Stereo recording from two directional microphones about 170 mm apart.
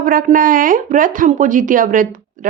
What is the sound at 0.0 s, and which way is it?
Speech, 55° right (ahead or behind).